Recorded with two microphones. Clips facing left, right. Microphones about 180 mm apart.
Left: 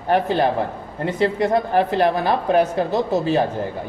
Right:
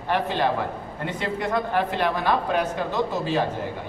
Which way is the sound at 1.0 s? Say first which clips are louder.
Left 8 dB; 35° left (ahead or behind).